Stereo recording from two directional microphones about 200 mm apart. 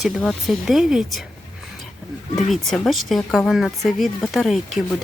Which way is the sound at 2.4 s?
Centre (ahead or behind).